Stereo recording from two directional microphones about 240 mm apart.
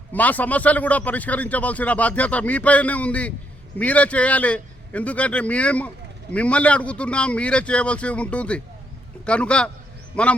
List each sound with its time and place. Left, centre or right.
0.1 s a man's voice: centre